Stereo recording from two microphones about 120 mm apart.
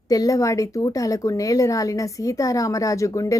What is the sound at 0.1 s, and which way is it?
Speech, 30° left (ahead or behind).